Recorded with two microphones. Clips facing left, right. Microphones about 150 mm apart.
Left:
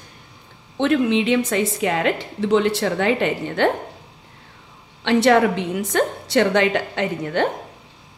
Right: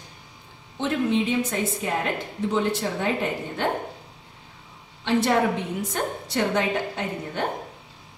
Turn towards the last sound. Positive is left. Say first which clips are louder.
# left 7 dB
turn(degrees=90)